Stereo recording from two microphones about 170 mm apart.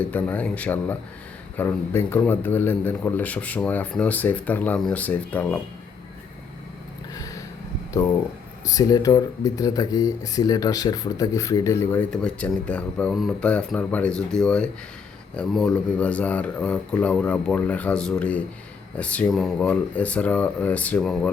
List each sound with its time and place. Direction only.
0.0 s speech: 10° left (ahead or behind)
8.6 s speech: 20° left (ahead or behind); by 21.2 s 5° left (ahead or behind)